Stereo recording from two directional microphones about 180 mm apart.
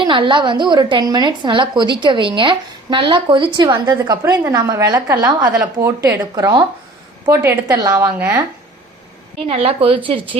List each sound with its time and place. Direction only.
0.0 s a woman's voice: 25° right (ahead or behind)
9.5 s a woman's voice: 35° right (ahead or behind)